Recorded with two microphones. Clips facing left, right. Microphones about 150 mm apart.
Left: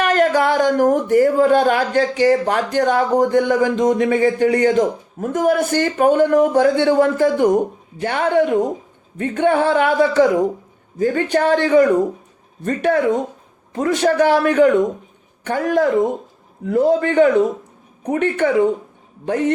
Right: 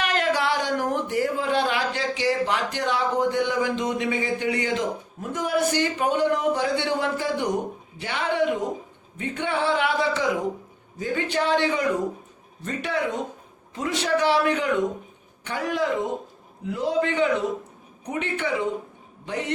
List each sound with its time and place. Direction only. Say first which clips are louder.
0.0 s speech: left 8 dB; 45° left (ahead or behind)